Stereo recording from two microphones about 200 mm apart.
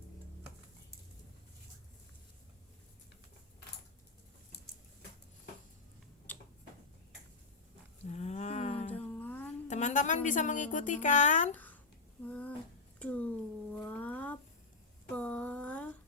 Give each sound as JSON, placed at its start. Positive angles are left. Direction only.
{"t": 6.3, "sound": "tick-tock", "side_deg": 10}
{"t": 8.0, "sound": "cattle", "side_deg": 35}
{"t": 8.9, "sound": "music", "side_deg": 10}
{"t": 9.6, "sound": "a woman's voice", "side_deg": 35}
{"t": 11.5, "sound": "a sound", "side_deg": 10}